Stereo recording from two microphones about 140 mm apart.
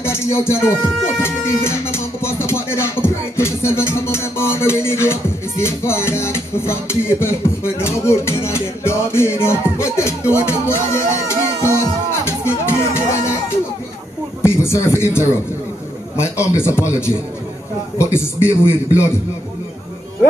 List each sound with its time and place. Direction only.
0.0 s music: 20° left (ahead or behind)
1.2 s a man's voice: 20° left (ahead or behind)
2.2 s music: 20° left (ahead or behind)
14.4 s a man's voice: 20° left (ahead or behind)